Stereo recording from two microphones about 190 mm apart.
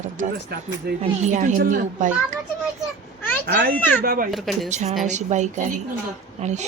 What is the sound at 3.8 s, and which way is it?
Speech, 10° left (ahead or behind).